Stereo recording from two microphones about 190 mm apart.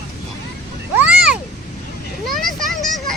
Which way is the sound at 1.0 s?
5° right (ahead or behind).